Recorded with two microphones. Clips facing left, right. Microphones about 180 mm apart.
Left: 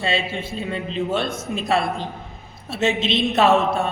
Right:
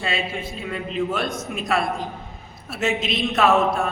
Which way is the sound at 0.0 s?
30° left (ahead or behind).